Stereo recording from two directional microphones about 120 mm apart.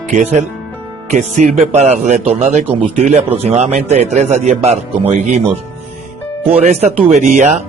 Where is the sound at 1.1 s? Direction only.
70° right (ahead or behind).